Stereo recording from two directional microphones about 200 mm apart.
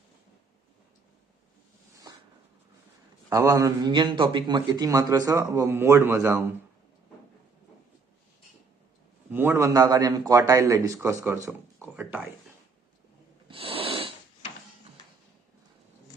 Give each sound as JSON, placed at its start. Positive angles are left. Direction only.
{"t": 3.2, "sound": "a man's voice", "side_deg": -15}
{"t": 9.3, "sound": "a man's voice", "side_deg": -10}
{"t": 13.5, "sound": "snort", "side_deg": -25}